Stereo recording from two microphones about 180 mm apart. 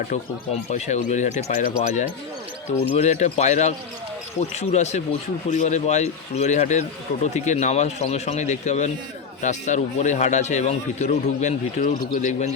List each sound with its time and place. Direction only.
0.7 s a man's voice: 40° left (ahead or behind)